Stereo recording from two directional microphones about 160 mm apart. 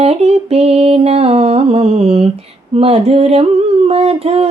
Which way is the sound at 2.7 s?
40° right (ahead or behind).